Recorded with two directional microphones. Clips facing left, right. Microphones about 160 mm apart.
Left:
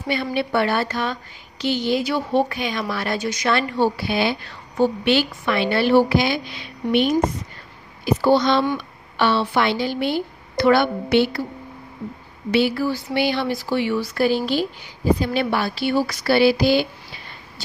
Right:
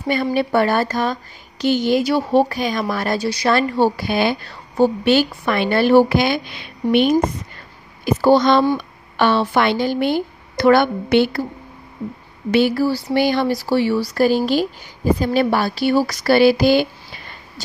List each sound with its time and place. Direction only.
0.1 s a woman's voice: 45° right (ahead or behind); by 7.2 s 60° right (ahead or behind)
8.0 s a woman's voice: 45° right (ahead or behind)
12.4 s a woman's voice: 50° right (ahead or behind)